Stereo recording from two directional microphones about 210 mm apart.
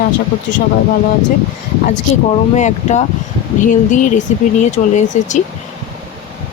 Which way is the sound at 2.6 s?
35° left (ahead or behind).